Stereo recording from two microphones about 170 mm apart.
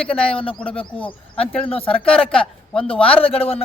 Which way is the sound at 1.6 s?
35° left (ahead or behind).